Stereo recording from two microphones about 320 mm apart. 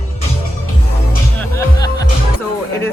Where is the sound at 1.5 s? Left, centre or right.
Centre.